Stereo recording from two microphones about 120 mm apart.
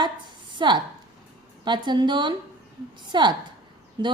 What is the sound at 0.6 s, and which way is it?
A woman's voice, 40° right (ahead or behind).